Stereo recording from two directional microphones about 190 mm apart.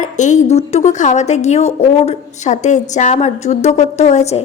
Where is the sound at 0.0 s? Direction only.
40° left (ahead or behind).